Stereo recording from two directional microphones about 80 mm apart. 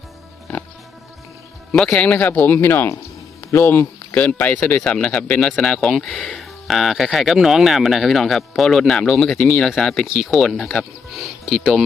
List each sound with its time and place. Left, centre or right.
1.7 s speech: centre
2.1 s speech: left
3.8 s speech: left
6.2 s speech: centre
11.1 s speech: centre